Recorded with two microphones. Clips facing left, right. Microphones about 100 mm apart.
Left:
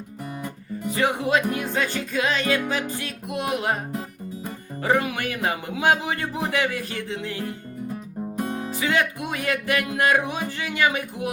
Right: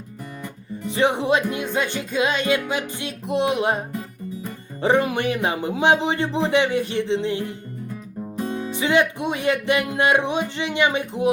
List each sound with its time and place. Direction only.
0.9 s speech: 25° right (ahead or behind)
4.8 s speech: 25° right (ahead or behind)
8.8 s speech: 20° right (ahead or behind)